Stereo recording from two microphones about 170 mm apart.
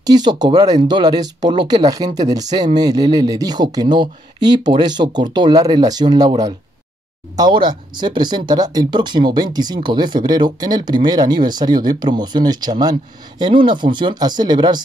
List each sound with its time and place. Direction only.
0.0 s speech: 25° right (ahead or behind)